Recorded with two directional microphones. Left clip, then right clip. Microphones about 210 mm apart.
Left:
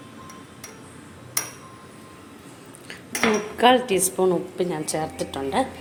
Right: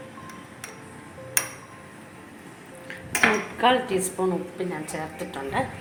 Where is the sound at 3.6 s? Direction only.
40° left (ahead or behind).